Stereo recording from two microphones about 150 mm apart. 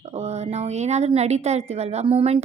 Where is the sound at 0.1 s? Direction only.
45° right (ahead or behind).